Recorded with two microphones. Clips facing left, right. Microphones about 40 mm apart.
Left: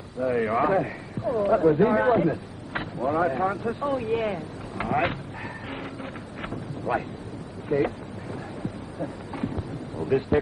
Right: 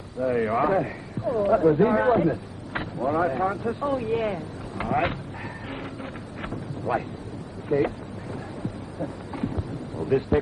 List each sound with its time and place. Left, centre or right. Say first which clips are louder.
0.2 s a man's voice: even; centre
6.4 s a sound: right 1 dB; centre
9.0 s wild animals: right 1 dB; centre
10.0 s speech: even; centre